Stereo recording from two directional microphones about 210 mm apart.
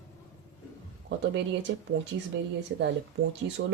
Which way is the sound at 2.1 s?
60° right (ahead or behind).